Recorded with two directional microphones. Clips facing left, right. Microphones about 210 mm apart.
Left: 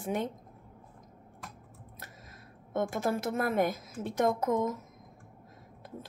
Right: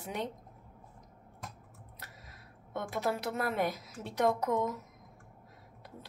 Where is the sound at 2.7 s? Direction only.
50° left (ahead or behind).